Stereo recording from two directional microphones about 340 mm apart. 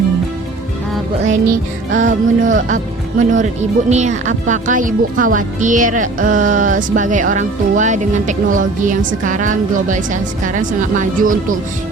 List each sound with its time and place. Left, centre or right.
2.0 s speech: right